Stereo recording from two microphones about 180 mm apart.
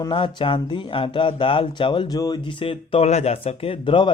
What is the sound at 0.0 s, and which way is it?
A man's voice, 25° left (ahead or behind).